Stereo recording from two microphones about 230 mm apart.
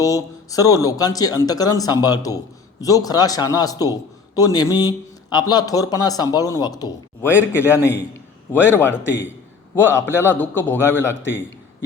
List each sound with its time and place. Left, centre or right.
0.0 s a man's voice: centre